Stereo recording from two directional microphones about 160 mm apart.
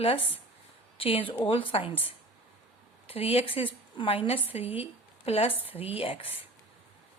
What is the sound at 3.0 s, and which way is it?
Speech, 35° left (ahead or behind).